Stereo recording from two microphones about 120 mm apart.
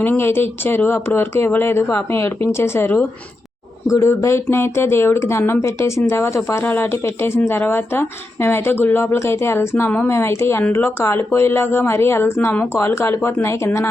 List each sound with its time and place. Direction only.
0.0 s speech: 20° left (ahead or behind)